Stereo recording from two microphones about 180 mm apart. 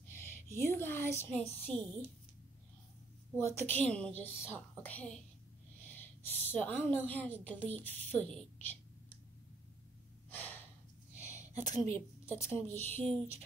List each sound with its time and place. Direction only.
0.1 s a woman's voice: 15° left (ahead or behind)
3.3 s a woman's voice: 15° left (ahead or behind)
10.3 s gasp: 10° left (ahead or behind)
11.1 s a sound: 15° left (ahead or behind)
12.3 s a woman's voice: 15° left (ahead or behind)